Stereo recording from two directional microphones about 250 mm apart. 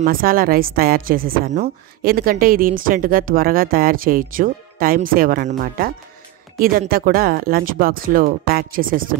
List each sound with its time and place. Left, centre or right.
0.0 s a woman's voice: right